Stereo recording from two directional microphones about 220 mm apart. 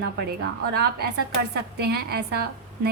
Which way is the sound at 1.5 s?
45° right (ahead or behind).